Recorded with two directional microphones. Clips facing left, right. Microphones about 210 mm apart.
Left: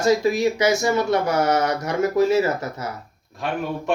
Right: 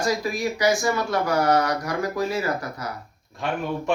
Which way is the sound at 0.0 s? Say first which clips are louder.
Left 6 dB; 25° left (ahead or behind).